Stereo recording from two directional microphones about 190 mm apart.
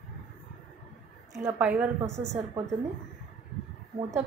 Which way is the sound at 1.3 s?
10° right (ahead or behind).